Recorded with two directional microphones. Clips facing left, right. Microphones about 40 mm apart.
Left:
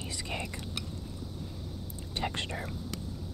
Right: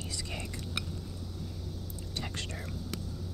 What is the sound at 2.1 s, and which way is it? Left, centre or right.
Speech, left.